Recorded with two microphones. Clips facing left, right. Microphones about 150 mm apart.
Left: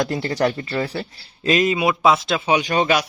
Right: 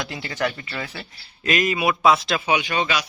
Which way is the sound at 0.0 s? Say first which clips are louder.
Left 6 dB; 40° left (ahead or behind).